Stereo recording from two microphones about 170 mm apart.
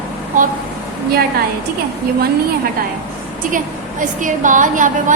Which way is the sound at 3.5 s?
50° right (ahead or behind).